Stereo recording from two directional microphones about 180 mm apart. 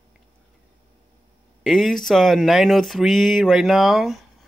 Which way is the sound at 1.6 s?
Centre (ahead or behind).